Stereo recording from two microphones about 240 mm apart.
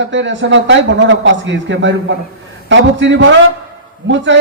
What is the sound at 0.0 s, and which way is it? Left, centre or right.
A man's voice, right.